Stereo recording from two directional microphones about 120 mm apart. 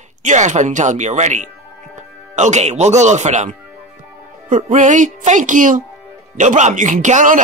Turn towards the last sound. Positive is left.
turn(degrees=-90)